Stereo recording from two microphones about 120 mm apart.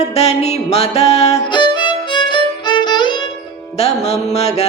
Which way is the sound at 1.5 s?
40° left (ahead or behind).